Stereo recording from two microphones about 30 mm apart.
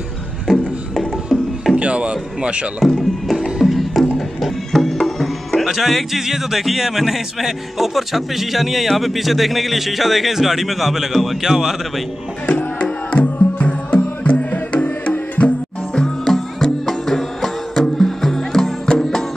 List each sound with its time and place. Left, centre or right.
0.5 s music: centre
1.8 s a sound: right
2.8 s music: centre
6.2 s speech: centre
12.4 s music: left
16.5 s music: centre